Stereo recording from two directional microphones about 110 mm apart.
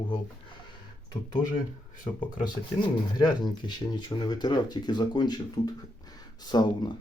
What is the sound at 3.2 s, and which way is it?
Speech, 40° left (ahead or behind).